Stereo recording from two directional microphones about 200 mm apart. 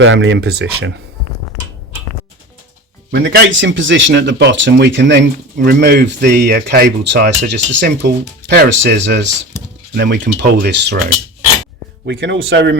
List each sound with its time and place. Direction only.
0.0 s speech: 70° right (ahead or behind)
3.1 s speech: 60° right (ahead or behind)
12.0 s speech: 60° right (ahead or behind)